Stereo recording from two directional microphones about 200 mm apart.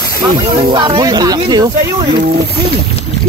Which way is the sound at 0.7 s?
25° right (ahead or behind).